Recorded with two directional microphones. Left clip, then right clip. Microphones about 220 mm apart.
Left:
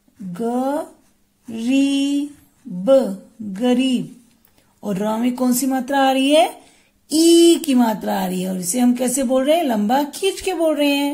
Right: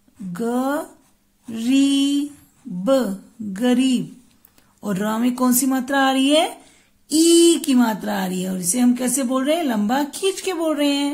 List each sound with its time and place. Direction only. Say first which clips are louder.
0.3 s mantra: left 1 dB; 10° right (ahead or behind)
2.8 s speech: left 4 dB; 10° right (ahead or behind)
3.5 s mantra: left 1 dB; 10° right (ahead or behind)
4.7 s speech: left 2 dB; 10° right (ahead or behind)